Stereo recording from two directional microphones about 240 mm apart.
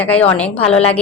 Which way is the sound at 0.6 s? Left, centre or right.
Left.